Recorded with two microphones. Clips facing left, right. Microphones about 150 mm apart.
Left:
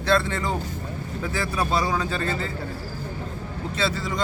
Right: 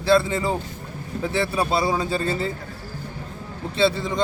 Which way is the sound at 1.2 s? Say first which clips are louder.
Right 4 dB; 30° right (ahead or behind).